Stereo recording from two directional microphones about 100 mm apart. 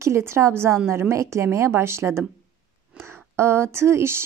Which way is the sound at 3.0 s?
25° right (ahead or behind).